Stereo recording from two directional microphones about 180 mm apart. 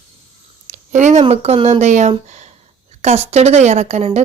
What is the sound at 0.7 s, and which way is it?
Speech, 40° right (ahead or behind).